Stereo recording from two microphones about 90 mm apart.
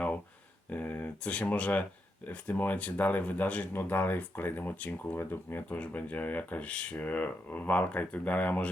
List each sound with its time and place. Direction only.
0.7 s speech: 20° left (ahead or behind)